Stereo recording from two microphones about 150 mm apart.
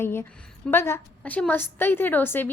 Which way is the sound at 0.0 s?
15° left (ahead or behind).